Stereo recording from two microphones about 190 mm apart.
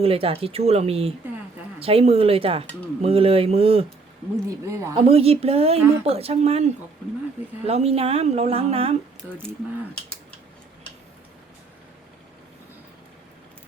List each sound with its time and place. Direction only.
0.0 s speech: 30° right (ahead or behind)
4.4 s speech: 15° right (ahead or behind)
5.0 s speech: 30° right (ahead or behind)
7.7 s speech: 30° right (ahead or behind)